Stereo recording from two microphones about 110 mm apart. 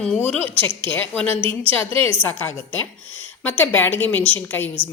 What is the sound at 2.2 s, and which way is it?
A woman's voice, 20° left (ahead or behind).